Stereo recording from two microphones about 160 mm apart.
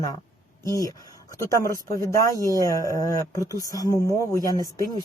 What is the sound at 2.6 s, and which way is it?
Speech, 20° left (ahead or behind).